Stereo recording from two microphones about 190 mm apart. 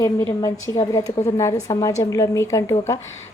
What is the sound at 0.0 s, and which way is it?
A woman's voice, 15° left (ahead or behind).